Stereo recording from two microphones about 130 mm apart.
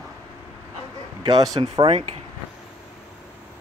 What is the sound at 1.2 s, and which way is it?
Speech, 30° right (ahead or behind).